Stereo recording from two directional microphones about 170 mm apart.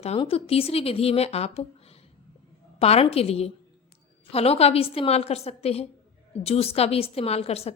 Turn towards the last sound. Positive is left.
turn(degrees=35)  # may be behind; listen again after turning